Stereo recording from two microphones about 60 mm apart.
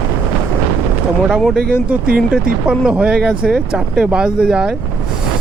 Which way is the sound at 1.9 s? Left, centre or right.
Right.